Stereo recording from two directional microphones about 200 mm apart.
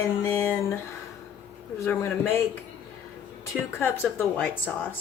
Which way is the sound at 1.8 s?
10° left (ahead or behind).